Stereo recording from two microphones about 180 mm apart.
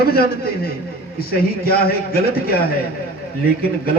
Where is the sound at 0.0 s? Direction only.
60° left (ahead or behind).